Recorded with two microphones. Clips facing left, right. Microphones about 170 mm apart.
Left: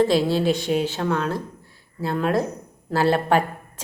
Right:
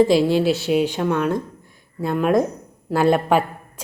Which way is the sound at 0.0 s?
15° right (ahead or behind).